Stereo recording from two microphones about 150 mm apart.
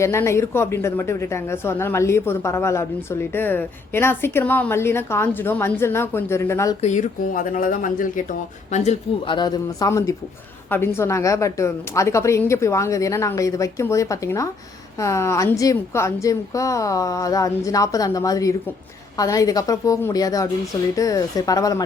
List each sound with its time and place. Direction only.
0.0 s a woman's voice: 20° left (ahead or behind)
6.8 s speech: 55° left (ahead or behind)
9.2 s a woman's voice: 30° left (ahead or behind)